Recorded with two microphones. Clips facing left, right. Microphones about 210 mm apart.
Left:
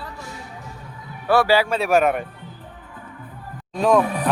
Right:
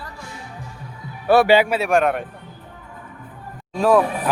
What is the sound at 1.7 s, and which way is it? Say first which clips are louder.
Speech: even; centre (ahead or behind).